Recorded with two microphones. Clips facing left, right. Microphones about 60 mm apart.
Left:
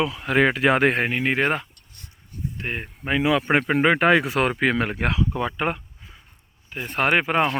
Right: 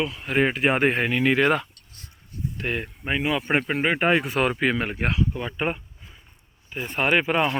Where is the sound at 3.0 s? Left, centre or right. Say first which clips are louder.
Left 4 dB; left.